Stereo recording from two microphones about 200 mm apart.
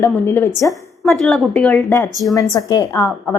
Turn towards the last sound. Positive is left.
turn(degrees=10)  # may be behind; listen again after turning